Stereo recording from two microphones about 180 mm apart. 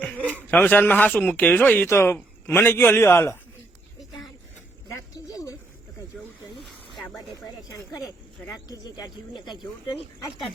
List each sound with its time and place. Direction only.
0.5 s a man's voice: 10° left (ahead or behind)
6.6 s a sound: centre (ahead or behind)
8.4 s speech: 20° left (ahead or behind)